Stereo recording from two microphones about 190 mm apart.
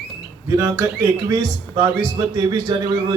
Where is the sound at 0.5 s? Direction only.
15° right (ahead or behind).